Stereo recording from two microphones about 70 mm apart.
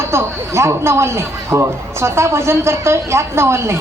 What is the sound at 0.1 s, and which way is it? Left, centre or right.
A man's voice, right.